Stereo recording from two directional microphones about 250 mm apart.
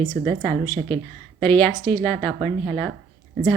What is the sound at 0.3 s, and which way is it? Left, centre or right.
Speech, right.